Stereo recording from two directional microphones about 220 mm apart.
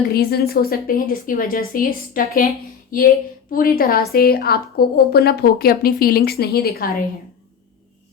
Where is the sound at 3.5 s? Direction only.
40° left (ahead or behind).